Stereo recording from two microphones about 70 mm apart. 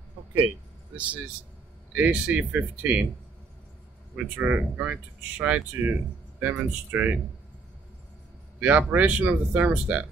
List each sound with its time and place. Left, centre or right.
0.9 s speech: centre
4.4 s speech: right
8.5 s speech: right